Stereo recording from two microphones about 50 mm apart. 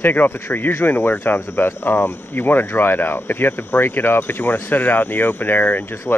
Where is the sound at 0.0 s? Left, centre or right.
Left.